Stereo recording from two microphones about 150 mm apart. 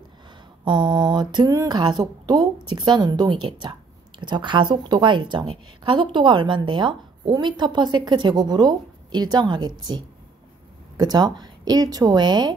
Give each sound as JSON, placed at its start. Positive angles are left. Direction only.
{"t": 0.7, "sound": "a woman's voice", "side_deg": -30}